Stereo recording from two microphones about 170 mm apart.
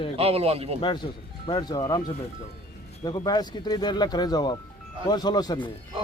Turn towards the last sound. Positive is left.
turn(degrees=25)  # may be behind; listen again after turning